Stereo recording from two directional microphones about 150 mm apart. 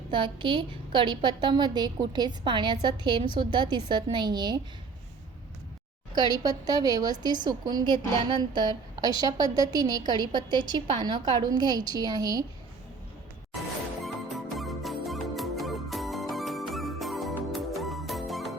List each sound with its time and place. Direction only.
0.1 s a woman's voice: 35° right (ahead or behind)
6.1 s a woman's voice: 25° right (ahead or behind)
14.0 s music: centre (ahead or behind)